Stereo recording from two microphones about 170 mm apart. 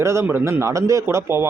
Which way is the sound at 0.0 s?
15° right (ahead or behind).